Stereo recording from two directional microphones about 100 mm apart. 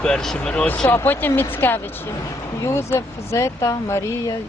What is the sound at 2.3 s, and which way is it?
Speech, 30° left (ahead or behind).